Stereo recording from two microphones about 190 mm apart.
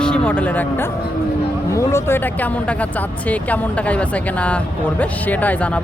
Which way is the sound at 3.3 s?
5° left (ahead or behind).